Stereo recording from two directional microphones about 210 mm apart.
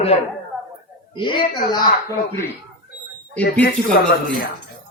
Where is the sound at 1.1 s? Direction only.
25° left (ahead or behind).